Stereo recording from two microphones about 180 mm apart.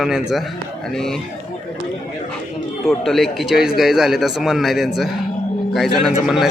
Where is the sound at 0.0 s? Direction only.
Centre (ahead or behind).